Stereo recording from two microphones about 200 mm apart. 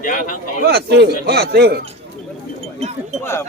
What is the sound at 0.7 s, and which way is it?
Speech, 55° right (ahead or behind).